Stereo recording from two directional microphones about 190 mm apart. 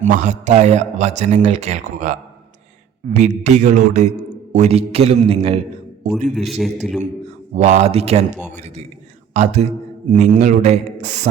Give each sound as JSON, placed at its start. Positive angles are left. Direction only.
{"t": 0.0, "sound": "a man's voice", "side_deg": -40}
{"t": 3.2, "sound": "a man's voice", "side_deg": -40}
{"t": 6.3, "sound": "a man's voice", "side_deg": 0}
{"t": 7.5, "sound": "a man's voice", "side_deg": -35}